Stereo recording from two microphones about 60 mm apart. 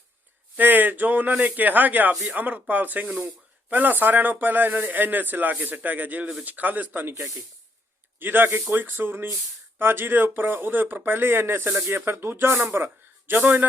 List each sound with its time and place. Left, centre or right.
0.5 s a man's voice: right